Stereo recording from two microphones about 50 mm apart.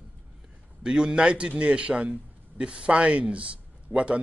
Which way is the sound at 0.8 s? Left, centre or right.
Centre.